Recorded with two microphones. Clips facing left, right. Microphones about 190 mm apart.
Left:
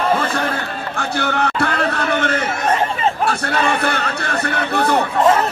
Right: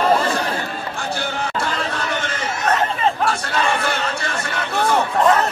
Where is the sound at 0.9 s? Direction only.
60° left (ahead or behind).